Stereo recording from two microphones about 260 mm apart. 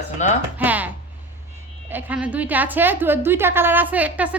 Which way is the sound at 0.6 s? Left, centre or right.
Centre.